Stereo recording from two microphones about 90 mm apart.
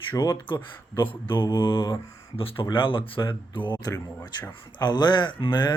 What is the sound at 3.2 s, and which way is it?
Speech, 60° left (ahead or behind).